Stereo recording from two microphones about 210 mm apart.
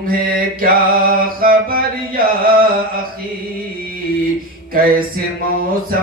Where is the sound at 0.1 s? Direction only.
45° right (ahead or behind).